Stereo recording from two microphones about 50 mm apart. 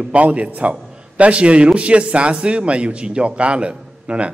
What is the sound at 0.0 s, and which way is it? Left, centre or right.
A man's voice, right.